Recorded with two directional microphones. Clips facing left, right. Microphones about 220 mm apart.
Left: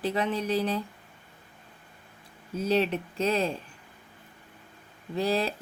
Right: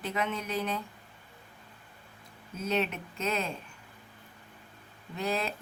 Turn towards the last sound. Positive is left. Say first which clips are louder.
# left 5 dB
turn(degrees=35)  # may be behind; listen again after turning